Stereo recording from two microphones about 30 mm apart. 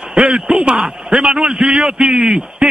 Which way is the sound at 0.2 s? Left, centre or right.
Right.